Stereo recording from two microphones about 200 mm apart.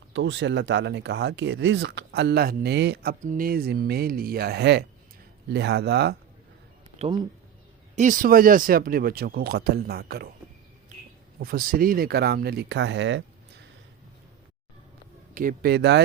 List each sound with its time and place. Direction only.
0.1 s speech: 65° right (ahead or behind)
7.9 s speech: 40° right (ahead or behind)
11.3 s speech: 45° right (ahead or behind); by 13.2 s 65° right (ahead or behind)
15.4 s speech: 45° right (ahead or behind)